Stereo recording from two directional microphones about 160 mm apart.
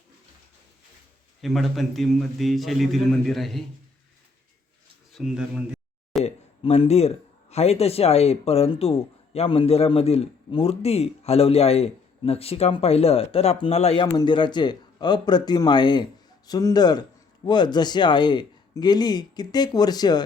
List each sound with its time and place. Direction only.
1.4 s a man's voice: centre (ahead or behind)
5.1 s a sound: 5° right (ahead or behind)
6.2 s speech: 40° left (ahead or behind)